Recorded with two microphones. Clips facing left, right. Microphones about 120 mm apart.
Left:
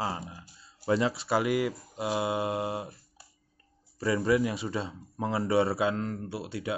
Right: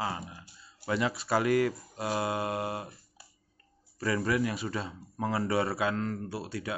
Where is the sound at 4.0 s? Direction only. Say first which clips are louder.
Left 3 dB; 20° left (ahead or behind).